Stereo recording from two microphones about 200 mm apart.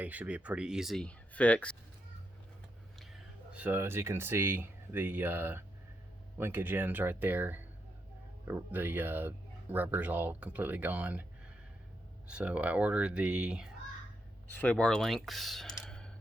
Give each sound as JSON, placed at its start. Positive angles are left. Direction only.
{"t": 0.0, "sound": "speech", "side_deg": -5}
{"t": 3.0, "sound": "speech", "side_deg": -5}
{"t": 12.3, "sound": "speech", "side_deg": -5}
{"t": 14.5, "sound": "speech", "side_deg": 10}